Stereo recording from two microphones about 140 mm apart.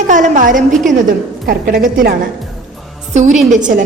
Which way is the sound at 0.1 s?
65° right (ahead or behind).